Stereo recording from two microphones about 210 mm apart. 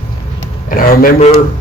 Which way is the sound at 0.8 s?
35° left (ahead or behind).